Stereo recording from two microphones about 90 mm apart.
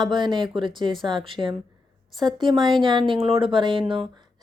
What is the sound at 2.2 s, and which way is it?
Speech, 60° right (ahead or behind).